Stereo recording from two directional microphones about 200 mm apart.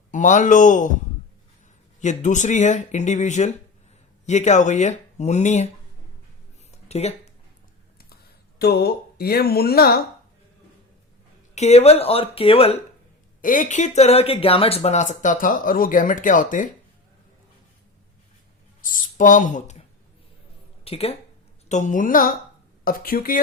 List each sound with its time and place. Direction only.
0.1 s speech: 40° left (ahead or behind)
2.0 s speech: 35° left (ahead or behind)
6.8 s speech: 30° left (ahead or behind)
7.9 s a sound: 50° left (ahead or behind)
11.5 s speech: 35° left (ahead or behind)
13.4 s speech: 40° left (ahead or behind)
18.8 s speech: 40° left (ahead or behind)
20.8 s a woman's voice: 30° left (ahead or behind); by 23.4 s 45° left (ahead or behind)